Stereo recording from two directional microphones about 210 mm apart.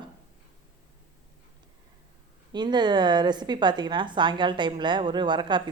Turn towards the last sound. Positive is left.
turn(degrees=-20)  # may be behind; listen again after turning